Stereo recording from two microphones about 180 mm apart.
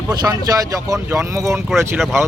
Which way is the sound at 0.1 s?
20° right (ahead or behind).